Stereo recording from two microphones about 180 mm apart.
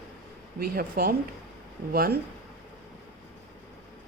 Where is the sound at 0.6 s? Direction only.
60° right (ahead or behind).